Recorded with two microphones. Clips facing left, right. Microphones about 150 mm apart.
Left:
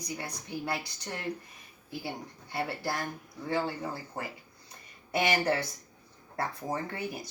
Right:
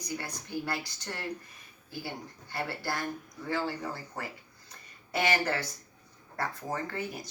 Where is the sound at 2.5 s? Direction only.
25° left (ahead or behind).